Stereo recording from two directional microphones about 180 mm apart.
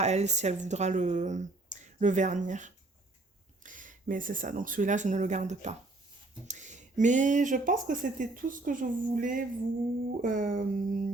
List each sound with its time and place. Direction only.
0.0 s speech: 40° right (ahead or behind)